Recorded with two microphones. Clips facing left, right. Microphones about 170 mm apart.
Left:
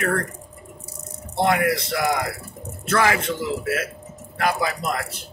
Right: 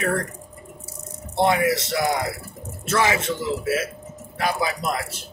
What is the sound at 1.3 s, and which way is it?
A man's voice, 25° right (ahead or behind).